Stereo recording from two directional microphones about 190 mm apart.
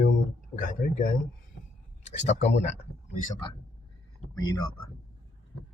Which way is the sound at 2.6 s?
45° left (ahead or behind).